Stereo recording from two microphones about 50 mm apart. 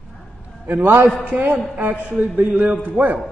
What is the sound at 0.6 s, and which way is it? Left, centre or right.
A man's voice, right.